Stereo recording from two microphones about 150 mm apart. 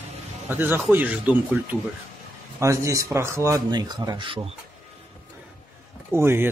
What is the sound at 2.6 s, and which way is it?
Speech, 20° right (ahead or behind).